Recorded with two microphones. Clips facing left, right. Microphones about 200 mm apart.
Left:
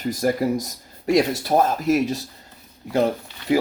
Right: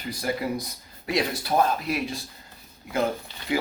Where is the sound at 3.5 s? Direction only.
40° left (ahead or behind).